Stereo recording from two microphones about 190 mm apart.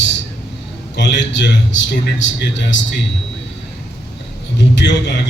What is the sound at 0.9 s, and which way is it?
A man's voice, 65° left (ahead or behind).